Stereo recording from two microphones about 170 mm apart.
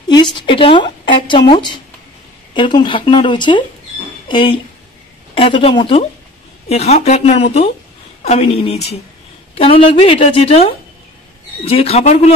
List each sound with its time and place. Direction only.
0.1 s a woman's voice: 25° left (ahead or behind); by 12.4 s 40° left (ahead or behind)